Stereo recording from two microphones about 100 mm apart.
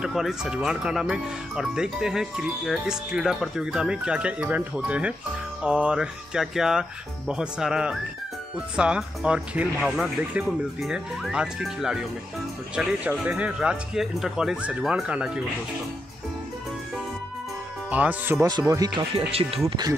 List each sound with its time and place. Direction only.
0.0 s speech: 5° right (ahead or behind)
17.8 s speech: 15° right (ahead or behind)
18.5 s speech: 40° right (ahead or behind)
19.1 s speech: 80° right